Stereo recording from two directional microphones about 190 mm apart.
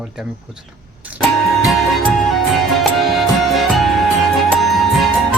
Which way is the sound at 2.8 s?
Centre (ahead or behind).